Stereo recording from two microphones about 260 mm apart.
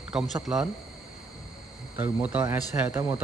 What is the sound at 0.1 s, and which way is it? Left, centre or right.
Speech, centre.